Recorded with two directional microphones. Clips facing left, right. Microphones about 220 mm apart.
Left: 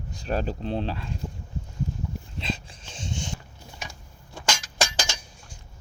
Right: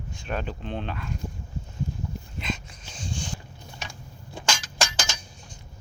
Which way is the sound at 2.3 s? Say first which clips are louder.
Left 1 dB; 30° left (ahead or behind).